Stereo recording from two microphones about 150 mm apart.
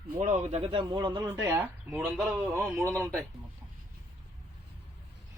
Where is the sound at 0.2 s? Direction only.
45° right (ahead or behind); by 1.3 s 30° right (ahead or behind).